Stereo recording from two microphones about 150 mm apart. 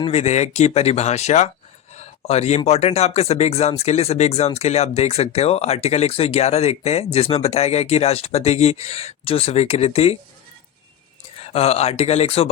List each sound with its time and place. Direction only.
0.1 s speech: 45° left (ahead or behind)
2.0 s a sound: 45° left (ahead or behind)
2.6 s speech: 45° left (ahead or behind)
11.4 s speech: 45° left (ahead or behind)